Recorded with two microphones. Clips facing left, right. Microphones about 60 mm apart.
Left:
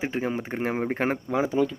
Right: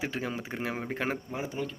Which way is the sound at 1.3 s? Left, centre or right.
Left.